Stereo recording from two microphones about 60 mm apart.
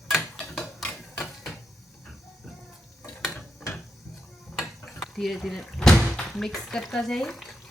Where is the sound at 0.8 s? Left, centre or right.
Centre.